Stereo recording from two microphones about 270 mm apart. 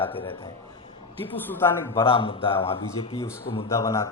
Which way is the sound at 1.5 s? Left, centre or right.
Centre.